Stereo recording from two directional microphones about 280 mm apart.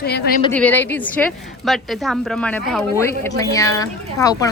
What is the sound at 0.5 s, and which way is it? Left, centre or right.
Speech, centre.